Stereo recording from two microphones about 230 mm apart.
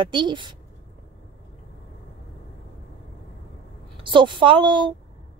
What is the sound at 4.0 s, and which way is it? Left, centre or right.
Speech, right.